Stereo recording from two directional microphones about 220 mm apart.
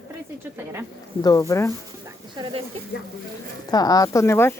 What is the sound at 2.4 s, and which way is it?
Speech, 20° right (ahead or behind).